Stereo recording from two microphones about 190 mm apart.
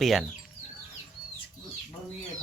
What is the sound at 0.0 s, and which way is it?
Speech, centre (ahead or behind).